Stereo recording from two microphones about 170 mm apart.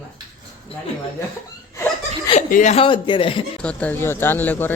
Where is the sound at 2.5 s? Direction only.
45° left (ahead or behind).